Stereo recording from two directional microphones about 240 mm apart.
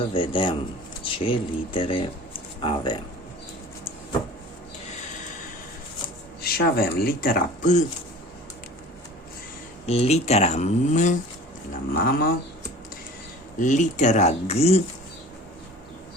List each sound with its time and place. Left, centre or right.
0.1 s speech: left
6.4 s speech: left
9.8 s speech: left
13.6 s speech: left